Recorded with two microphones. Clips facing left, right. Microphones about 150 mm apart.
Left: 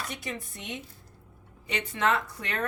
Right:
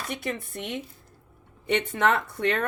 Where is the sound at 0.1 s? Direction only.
55° right (ahead or behind).